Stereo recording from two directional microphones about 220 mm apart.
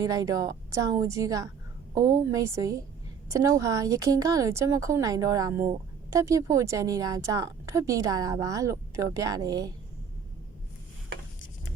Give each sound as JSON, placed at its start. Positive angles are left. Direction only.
{"t": 0.0, "sound": "speech", "side_deg": -15}